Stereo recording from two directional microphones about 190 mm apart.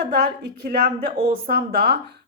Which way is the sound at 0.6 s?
50° right (ahead or behind).